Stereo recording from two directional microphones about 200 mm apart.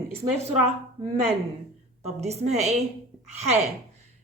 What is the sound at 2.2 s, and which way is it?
Speech, 35° right (ahead or behind).